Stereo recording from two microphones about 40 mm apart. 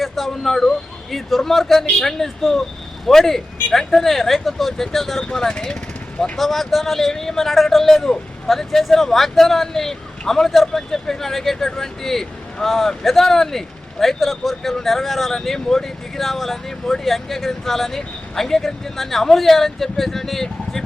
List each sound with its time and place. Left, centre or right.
0.0 s speech: centre
5.2 s speech: centre
6.3 s speech: centre